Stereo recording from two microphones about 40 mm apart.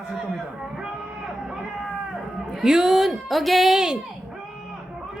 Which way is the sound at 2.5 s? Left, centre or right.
Centre.